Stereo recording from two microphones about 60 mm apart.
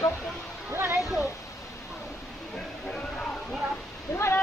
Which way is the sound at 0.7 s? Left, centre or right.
Right.